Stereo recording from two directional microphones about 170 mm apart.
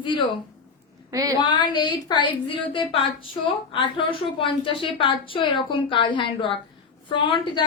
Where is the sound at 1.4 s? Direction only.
25° left (ahead or behind).